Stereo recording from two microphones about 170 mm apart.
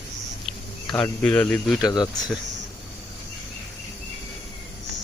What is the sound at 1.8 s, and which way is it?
Speech, 25° left (ahead or behind).